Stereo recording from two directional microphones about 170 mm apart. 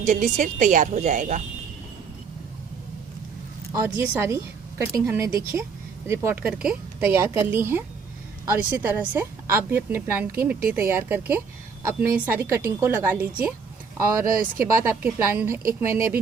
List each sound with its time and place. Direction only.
0.0 s a woman's voice: 50° right (ahead or behind)
3.7 s a woman's voice: 15° right (ahead or behind)
14.6 s a woman's voice: 15° right (ahead or behind)